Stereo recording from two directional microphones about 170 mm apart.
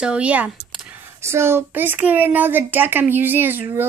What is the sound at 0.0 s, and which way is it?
A woman's voice, 5° right (ahead or behind).